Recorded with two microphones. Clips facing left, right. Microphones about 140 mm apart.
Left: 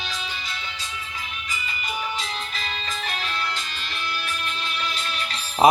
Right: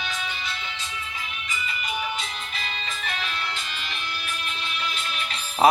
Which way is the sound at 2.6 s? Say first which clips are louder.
Left 2 dB; 35° left (ahead or behind).